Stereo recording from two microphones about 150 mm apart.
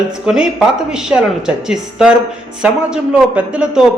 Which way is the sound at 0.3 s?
5° right (ahead or behind).